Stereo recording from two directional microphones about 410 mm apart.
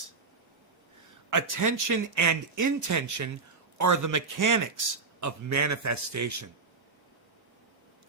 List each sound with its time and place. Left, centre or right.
1.3 s a man's voice: right